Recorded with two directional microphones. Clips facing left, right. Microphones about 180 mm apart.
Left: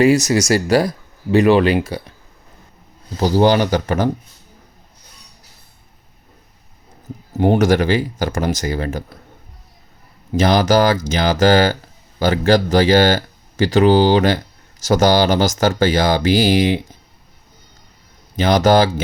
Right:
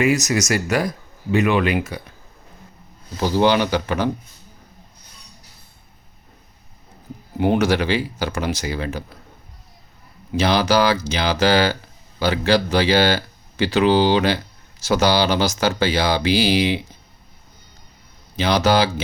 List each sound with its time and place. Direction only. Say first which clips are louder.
0.0 s speech: left 5 dB; 30° left (ahead or behind)
3.2 s speech: left 3 dB; 40° left (ahead or behind)
7.3 s speech: left 4 dB; 40° left (ahead or behind)
10.3 s speech: left 4 dB; 45° left (ahead or behind)
18.3 s speech: left 4 dB; 45° left (ahead or behind)